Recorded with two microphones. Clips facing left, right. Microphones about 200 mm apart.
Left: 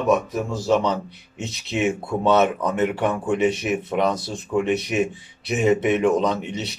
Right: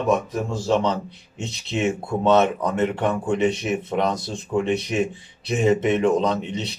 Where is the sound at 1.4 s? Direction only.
Centre (ahead or behind).